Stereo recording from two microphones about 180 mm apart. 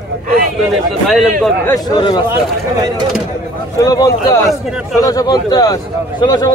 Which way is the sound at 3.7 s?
20° left (ahead or behind).